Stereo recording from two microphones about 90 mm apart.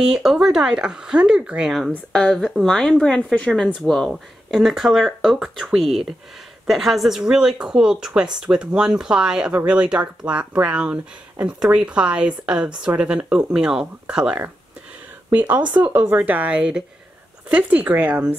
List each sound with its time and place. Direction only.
0.0 s speech: 5° right (ahead or behind)
2.1 s speech: 5° left (ahead or behind); by 18.2 s 20° right (ahead or behind)